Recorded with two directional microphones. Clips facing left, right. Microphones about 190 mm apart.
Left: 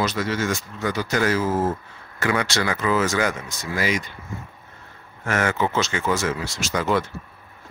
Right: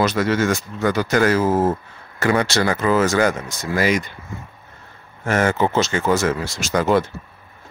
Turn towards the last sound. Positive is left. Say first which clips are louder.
# right 5 dB
turn(degrees=-50)  # may be behind; listen again after turning